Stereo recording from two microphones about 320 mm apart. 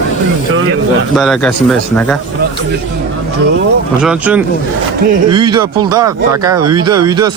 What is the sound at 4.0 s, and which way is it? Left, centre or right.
Speech, centre.